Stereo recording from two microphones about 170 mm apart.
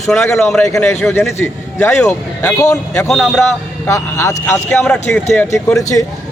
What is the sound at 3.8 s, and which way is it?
A man's voice, 15° left (ahead or behind).